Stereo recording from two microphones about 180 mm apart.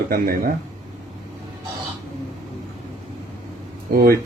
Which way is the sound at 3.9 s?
55° right (ahead or behind).